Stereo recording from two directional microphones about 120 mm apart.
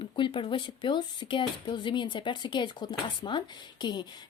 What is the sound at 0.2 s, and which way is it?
A woman's voice, 45° left (ahead or behind).